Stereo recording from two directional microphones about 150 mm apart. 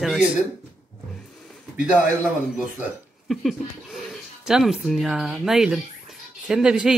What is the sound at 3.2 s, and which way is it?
Speech, centre (ahead or behind).